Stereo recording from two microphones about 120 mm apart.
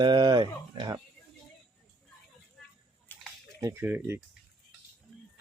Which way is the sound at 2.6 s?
Centre (ahead or behind).